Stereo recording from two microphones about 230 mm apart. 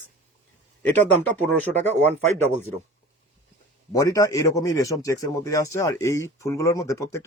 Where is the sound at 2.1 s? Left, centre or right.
Right.